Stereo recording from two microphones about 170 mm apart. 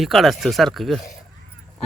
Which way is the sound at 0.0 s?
Centre (ahead or behind).